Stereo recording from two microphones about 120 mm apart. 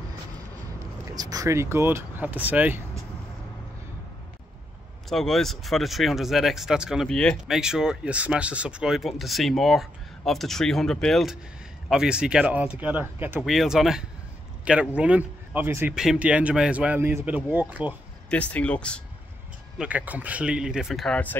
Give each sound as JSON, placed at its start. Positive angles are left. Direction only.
{"t": 1.1, "sound": "speech", "side_deg": -30}
{"t": 5.1, "sound": "speech", "side_deg": 5}
{"t": 7.1, "sound": "speech", "side_deg": 5}
{"t": 13.5, "sound": "speech", "side_deg": 0}
{"t": 15.9, "sound": "speech", "side_deg": -5}
{"t": 18.3, "sound": "speech", "side_deg": 10}
{"t": 19.8, "sound": "speech", "side_deg": -10}